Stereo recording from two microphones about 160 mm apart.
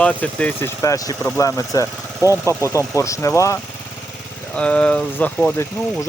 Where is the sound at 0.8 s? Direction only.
20° left (ahead or behind).